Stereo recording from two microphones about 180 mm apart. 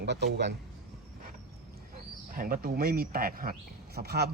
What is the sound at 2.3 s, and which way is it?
Speech, 50° right (ahead or behind).